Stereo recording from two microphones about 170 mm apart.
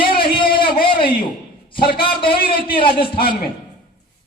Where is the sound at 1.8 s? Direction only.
30° left (ahead or behind).